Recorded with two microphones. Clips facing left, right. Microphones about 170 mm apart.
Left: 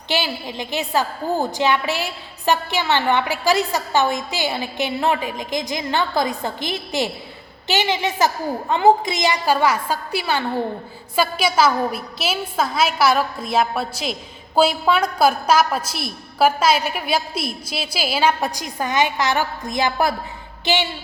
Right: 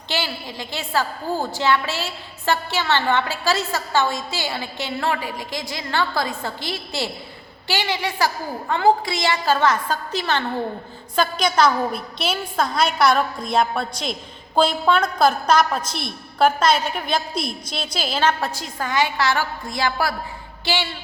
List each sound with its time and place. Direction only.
0.1 s a woman's voice: 20° left (ahead or behind)